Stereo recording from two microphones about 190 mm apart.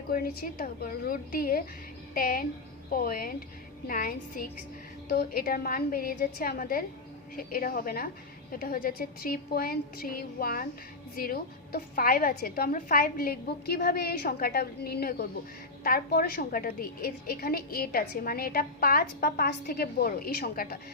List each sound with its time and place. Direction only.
0.1 s a woman's voice: 50° left (ahead or behind)